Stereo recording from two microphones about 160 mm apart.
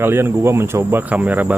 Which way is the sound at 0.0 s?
15° right (ahead or behind).